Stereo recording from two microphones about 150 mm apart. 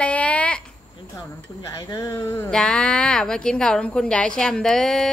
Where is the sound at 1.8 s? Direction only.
20° left (ahead or behind).